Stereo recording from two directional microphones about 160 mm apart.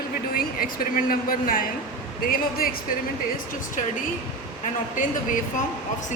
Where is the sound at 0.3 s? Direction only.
65° left (ahead or behind).